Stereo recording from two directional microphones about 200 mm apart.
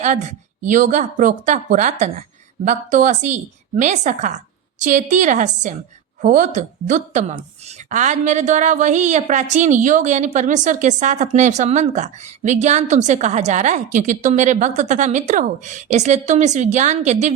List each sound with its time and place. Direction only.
0.0 s a woman's voice: 35° right (ahead or behind)